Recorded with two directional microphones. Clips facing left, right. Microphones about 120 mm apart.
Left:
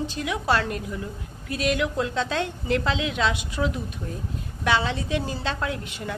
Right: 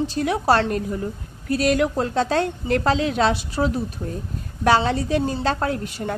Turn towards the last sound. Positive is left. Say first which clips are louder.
# right 5 dB
turn(degrees=-40)  # may be behind; listen again after turning